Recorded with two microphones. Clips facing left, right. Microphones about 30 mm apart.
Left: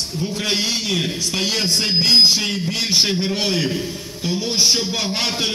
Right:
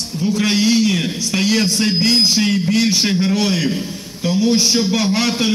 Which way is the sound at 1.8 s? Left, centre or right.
Centre.